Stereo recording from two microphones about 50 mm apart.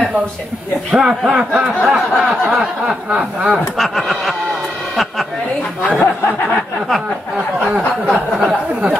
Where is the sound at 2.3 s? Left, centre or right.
Centre.